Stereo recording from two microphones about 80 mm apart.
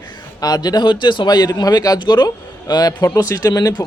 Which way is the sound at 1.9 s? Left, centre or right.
Left.